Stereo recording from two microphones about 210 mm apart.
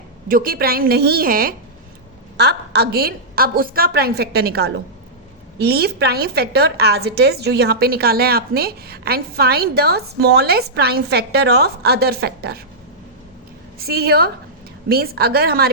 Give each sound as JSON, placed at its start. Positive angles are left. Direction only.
{"t": 0.3, "sound": "a woman's voice", "side_deg": -45}
{"t": 13.7, "sound": "a woman's voice", "side_deg": -50}